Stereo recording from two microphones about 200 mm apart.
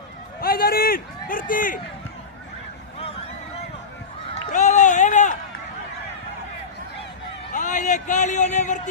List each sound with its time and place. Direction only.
0.4 s a sound: 50° left (ahead or behind)
4.5 s run: 35° left (ahead or behind)
7.5 s a man's voice: 40° left (ahead or behind)